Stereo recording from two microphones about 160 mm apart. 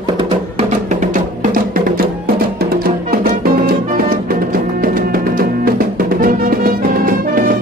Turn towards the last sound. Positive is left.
turn(degrees=-60)  # may be behind; listen again after turning